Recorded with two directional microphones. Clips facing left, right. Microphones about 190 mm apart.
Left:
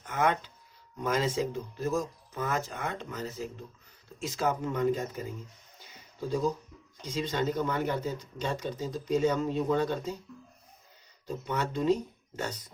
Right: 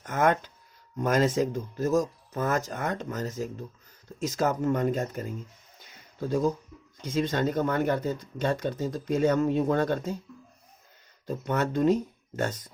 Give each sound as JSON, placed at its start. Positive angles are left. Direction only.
{"t": 0.0, "sound": "speech", "side_deg": -45}
{"t": 11.3, "sound": "speech", "side_deg": -50}